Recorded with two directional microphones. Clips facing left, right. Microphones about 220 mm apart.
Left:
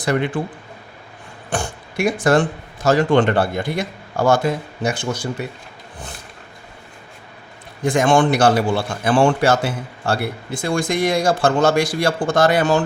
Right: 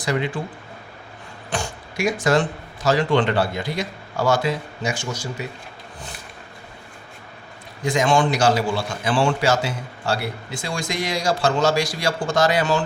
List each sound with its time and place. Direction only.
0.0 s speech: 55° left (ahead or behind)
1.5 s speech: 55° left (ahead or behind)
7.9 s a man's voice: 55° left (ahead or behind)